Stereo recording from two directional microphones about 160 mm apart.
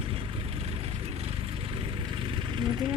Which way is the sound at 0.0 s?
35° right (ahead or behind).